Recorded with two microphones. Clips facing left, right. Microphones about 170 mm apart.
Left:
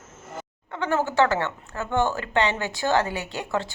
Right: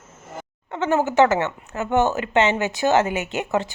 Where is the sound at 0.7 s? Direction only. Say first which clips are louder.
Right 4 dB; 20° right (ahead or behind).